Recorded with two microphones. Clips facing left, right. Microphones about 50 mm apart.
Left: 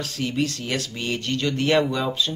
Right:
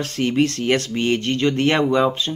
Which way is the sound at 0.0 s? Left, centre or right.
Right.